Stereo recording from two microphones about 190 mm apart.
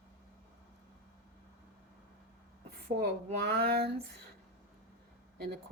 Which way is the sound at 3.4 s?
55° right (ahead or behind).